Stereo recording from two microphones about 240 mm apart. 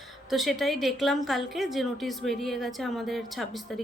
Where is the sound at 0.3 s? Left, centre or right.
Centre.